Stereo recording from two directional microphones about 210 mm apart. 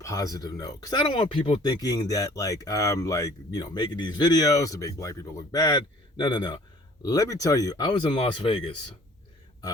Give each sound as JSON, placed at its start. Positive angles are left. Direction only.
{"t": 0.0, "sound": "speech", "side_deg": 15}